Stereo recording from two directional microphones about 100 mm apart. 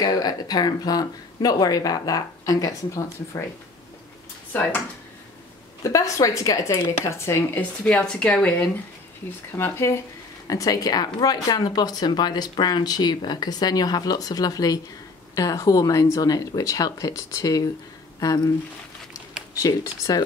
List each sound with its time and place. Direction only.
0.0 s speech: 40° left (ahead or behind)
5.8 s speech: 35° left (ahead or behind)
7.2 s speech: 15° left (ahead or behind)
9.6 s speech: 30° left (ahead or behind)
19.5 s speech: 35° left (ahead or behind)